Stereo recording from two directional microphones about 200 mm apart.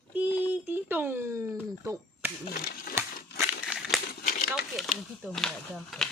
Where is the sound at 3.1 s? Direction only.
50° left (ahead or behind).